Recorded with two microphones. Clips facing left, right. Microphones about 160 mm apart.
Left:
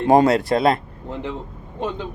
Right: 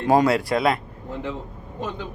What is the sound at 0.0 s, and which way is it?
Speech, 25° left (ahead or behind).